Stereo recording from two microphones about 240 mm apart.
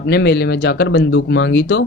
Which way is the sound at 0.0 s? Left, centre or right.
Left.